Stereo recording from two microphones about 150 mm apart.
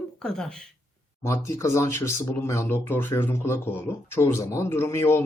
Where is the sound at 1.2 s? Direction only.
20° left (ahead or behind).